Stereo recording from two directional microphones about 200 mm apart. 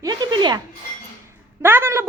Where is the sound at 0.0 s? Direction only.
20° right (ahead or behind).